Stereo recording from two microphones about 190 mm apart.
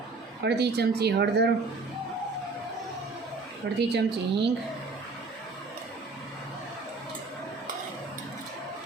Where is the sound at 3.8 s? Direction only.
65° right (ahead or behind).